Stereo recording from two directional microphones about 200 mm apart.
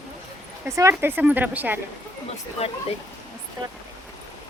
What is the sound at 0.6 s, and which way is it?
Speech, 15° right (ahead or behind).